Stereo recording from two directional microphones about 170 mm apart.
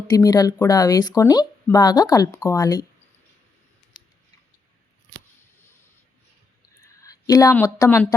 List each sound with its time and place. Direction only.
0.1 s speech: 20° left (ahead or behind)
6.8 s a sound: 20° left (ahead or behind)
7.5 s speech: 10° left (ahead or behind)